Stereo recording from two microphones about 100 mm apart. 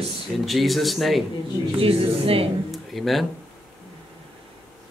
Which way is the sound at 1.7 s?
70° right (ahead or behind).